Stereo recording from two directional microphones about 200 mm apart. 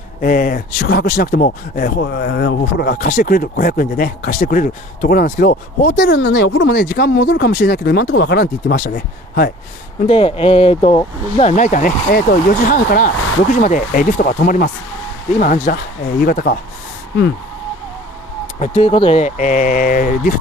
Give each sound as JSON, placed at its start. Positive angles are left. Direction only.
{"t": 0.2, "sound": "speech", "side_deg": 45}
{"t": 10.0, "sound": "speech", "side_deg": 30}
{"t": 18.6, "sound": "speech", "side_deg": 30}